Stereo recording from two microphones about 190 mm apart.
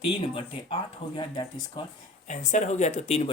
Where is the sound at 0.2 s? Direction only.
30° left (ahead or behind).